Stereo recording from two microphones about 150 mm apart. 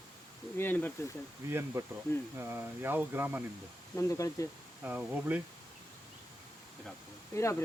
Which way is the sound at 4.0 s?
20° left (ahead or behind).